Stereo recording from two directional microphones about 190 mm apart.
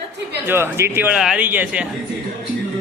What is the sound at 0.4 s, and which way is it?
A man's voice, 10° right (ahead or behind).